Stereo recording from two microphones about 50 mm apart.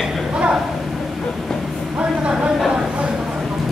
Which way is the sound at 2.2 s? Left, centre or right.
Right.